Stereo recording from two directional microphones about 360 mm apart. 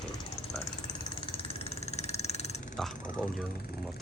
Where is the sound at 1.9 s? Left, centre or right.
Centre.